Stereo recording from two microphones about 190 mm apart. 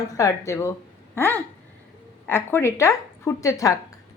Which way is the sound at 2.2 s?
10° left (ahead or behind).